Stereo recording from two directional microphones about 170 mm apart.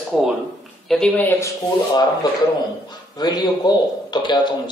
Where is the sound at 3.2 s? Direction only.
25° left (ahead or behind).